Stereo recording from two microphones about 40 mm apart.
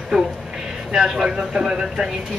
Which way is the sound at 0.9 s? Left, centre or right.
Centre.